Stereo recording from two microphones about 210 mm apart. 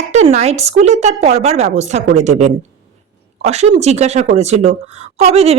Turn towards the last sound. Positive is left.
turn(degrees=-30)  # may be behind; listen again after turning